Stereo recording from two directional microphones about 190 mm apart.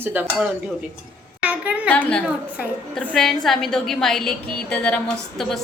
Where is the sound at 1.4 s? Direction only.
5° right (ahead or behind).